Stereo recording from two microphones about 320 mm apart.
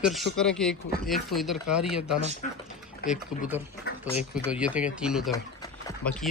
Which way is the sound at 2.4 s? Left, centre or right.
Left.